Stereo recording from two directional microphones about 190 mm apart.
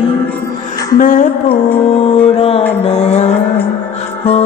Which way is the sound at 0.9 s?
45° left (ahead or behind).